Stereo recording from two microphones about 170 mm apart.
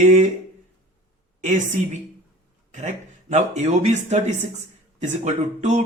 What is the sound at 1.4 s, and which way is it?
Speech, 45° right (ahead or behind).